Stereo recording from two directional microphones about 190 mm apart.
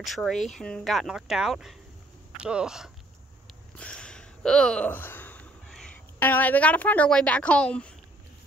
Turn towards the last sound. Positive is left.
turn(degrees=5)  # may be behind; listen again after turning